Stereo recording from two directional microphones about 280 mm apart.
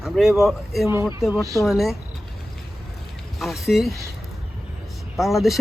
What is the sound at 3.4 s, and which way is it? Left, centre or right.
Speech, centre.